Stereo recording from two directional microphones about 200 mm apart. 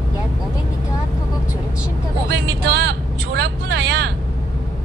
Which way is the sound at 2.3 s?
55° right (ahead or behind).